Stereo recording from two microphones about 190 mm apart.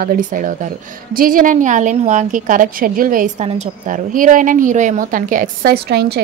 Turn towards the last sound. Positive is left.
turn(degrees=-55)  # may be behind; listen again after turning